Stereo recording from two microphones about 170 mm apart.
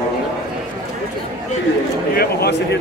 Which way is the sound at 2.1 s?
70° left (ahead or behind).